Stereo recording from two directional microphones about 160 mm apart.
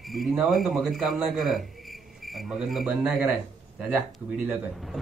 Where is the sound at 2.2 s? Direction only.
Centre (ahead or behind).